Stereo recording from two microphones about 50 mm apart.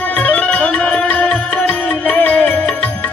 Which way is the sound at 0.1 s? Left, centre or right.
Left.